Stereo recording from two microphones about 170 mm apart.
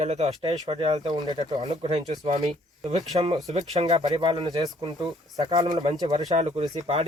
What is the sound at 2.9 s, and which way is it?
Speech, 40° right (ahead or behind).